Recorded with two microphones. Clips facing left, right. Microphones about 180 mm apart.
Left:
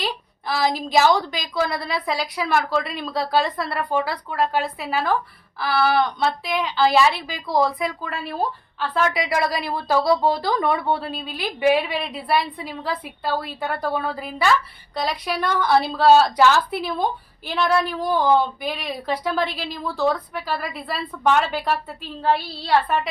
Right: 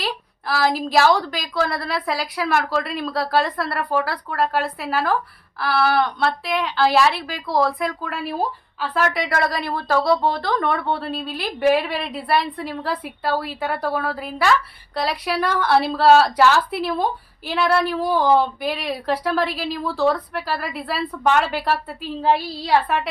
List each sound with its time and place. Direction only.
0.0 s speech: 5° right (ahead or behind)